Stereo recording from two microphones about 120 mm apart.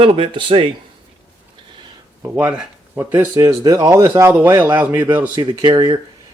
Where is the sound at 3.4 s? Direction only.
25° right (ahead or behind).